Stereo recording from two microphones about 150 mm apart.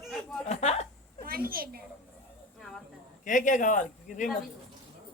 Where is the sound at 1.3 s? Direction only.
75° right (ahead or behind).